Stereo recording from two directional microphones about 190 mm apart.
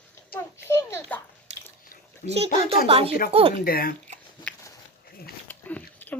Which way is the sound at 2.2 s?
45° left (ahead or behind).